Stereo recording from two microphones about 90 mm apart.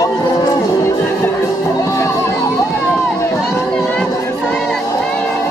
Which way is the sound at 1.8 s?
35° left (ahead or behind).